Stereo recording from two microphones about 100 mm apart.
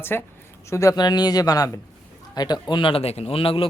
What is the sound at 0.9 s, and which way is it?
A man's voice, 45° left (ahead or behind).